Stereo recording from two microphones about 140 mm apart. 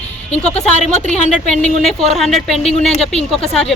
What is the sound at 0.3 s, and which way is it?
Speech, 50° left (ahead or behind).